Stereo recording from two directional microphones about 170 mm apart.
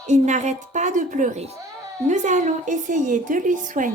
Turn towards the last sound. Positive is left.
turn(degrees=-50)  # may be behind; listen again after turning